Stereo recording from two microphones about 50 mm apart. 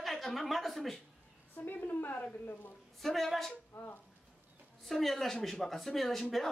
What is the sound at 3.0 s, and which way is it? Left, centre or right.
Speech, centre.